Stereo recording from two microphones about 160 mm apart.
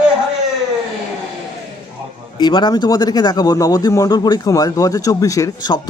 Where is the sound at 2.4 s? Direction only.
30° left (ahead or behind).